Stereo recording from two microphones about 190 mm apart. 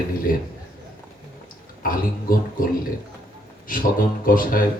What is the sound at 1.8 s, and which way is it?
Speech, 50° left (ahead or behind).